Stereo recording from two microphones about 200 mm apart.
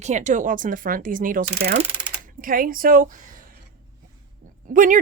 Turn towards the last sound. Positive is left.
turn(degrees=-40)  # may be behind; listen again after turning